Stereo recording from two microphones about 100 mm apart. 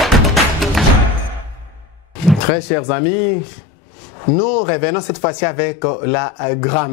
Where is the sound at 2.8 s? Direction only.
15° left (ahead or behind).